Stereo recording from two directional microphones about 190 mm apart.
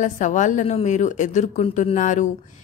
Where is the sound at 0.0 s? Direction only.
40° left (ahead or behind).